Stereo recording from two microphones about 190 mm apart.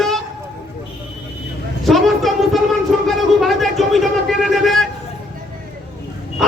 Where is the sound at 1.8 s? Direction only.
Centre (ahead or behind).